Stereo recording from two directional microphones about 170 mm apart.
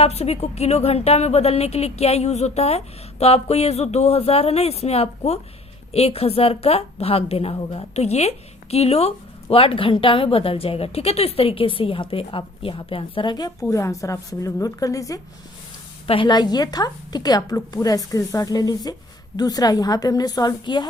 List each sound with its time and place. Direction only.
0.0 s a woman's voice: 35° left (ahead or behind); by 15.2 s 20° left (ahead or behind)
16.0 s a woman's voice: 30° left (ahead or behind)